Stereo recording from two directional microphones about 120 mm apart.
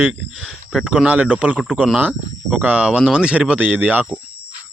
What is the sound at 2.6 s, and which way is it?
Speech, 10° right (ahead or behind).